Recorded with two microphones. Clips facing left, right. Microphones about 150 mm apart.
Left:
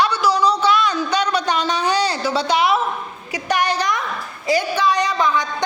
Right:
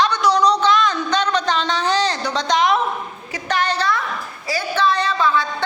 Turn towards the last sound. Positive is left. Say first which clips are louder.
# even
turn(degrees=15)  # may be behind; listen again after turning